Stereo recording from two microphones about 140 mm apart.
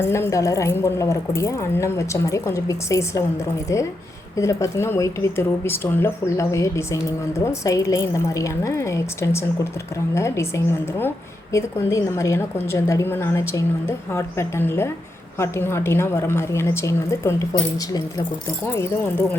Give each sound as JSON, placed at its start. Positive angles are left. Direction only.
{"t": 0.0, "sound": "speech", "side_deg": 20}
{"t": 4.4, "sound": "a woman's voice", "side_deg": 20}
{"t": 18.7, "sound": "a woman's voice", "side_deg": 15}